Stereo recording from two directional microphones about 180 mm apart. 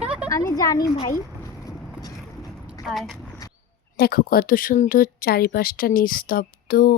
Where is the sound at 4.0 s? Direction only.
55° left (ahead or behind).